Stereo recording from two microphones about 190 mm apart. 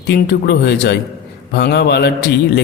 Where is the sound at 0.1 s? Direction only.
60° left (ahead or behind).